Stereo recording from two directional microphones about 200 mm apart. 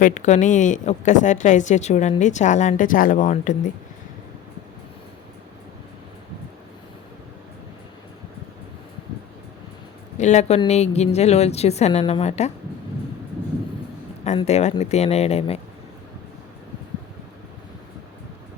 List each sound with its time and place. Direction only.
0.0 s a woman's voice: 35° left (ahead or behind)
10.2 s a woman's voice: 35° left (ahead or behind)
14.3 s a woman's voice: 35° left (ahead or behind)